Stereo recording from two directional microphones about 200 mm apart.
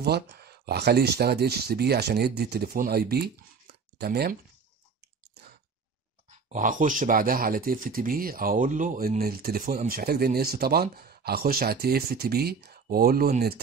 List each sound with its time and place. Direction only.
0.0 s speech: 55° right (ahead or behind)
6.5 s speech: 40° right (ahead or behind)